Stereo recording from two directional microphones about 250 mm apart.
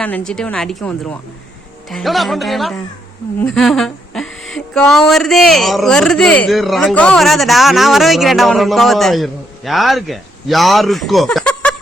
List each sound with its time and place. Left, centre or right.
0.0 s music: centre